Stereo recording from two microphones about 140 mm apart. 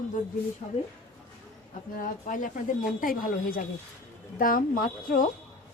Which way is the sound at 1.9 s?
75° left (ahead or behind).